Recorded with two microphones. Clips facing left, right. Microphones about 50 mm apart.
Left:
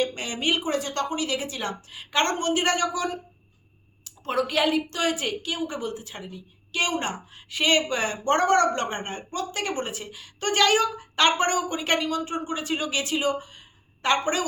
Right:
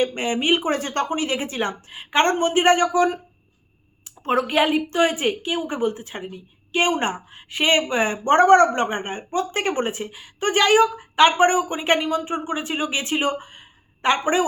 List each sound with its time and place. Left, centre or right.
0.0 s a woman's voice: right
14.0 s a woman's voice: right